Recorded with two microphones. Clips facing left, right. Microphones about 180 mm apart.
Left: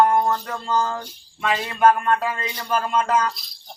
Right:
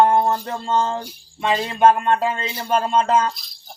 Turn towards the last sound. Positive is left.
turn(degrees=0)  # may be behind; listen again after turning